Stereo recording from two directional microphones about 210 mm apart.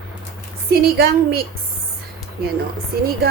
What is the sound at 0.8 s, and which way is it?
Speech, 50° right (ahead or behind).